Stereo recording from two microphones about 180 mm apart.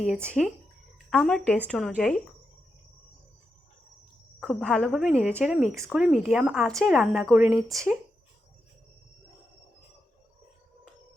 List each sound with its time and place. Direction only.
0.1 s a woman's voice: 5° left (ahead or behind)
4.4 s a woman's voice: 5° left (ahead or behind)
7.5 s speech: 20° right (ahead or behind)